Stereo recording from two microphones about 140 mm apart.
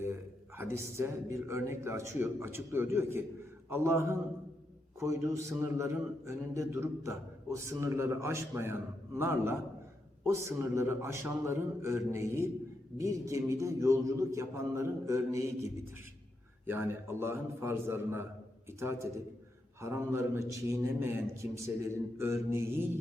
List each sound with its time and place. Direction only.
0.5 s a man's voice: 15° right (ahead or behind)
16.6 s a man's voice: 15° right (ahead or behind)